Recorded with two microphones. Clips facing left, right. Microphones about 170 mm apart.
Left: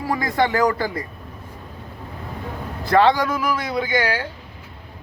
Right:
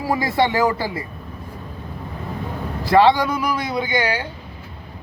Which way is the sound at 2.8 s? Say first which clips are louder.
Right 2 dB; centre (ahead or behind).